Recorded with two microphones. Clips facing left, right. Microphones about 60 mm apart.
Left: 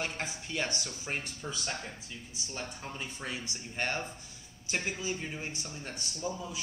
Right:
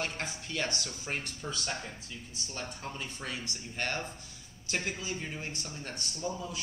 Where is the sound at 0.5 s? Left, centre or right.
Centre.